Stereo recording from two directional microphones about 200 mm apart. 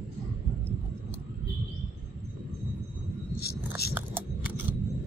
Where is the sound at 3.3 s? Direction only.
50° left (ahead or behind).